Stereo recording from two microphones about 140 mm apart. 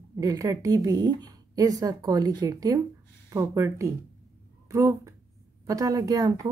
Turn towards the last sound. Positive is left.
turn(degrees=-25)  # may be behind; listen again after turning